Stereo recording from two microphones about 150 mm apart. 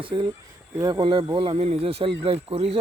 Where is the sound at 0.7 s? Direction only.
25° right (ahead or behind); by 2.8 s 40° right (ahead or behind).